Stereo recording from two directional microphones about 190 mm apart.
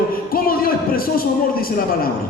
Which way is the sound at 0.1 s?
50° left (ahead or behind).